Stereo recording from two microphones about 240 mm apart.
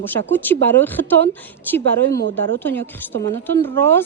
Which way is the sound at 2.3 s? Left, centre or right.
Right.